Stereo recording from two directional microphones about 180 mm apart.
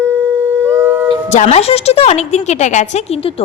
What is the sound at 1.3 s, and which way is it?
A woman's voice, 40° left (ahead or behind).